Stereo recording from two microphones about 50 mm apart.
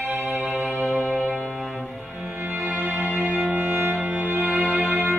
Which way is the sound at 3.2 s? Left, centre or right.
Right.